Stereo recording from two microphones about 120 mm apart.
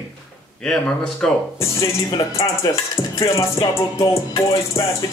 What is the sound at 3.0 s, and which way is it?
Music, 25° left (ahead or behind).